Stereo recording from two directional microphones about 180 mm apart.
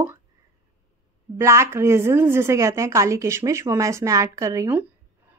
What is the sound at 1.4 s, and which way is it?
A woman's voice, 15° right (ahead or behind).